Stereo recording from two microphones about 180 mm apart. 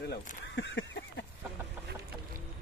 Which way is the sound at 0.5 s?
75° left (ahead or behind).